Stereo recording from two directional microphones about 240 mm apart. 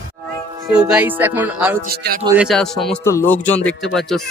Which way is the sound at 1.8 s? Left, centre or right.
Right.